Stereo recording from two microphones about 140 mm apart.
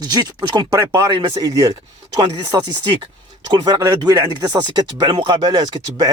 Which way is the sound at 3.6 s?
25° right (ahead or behind).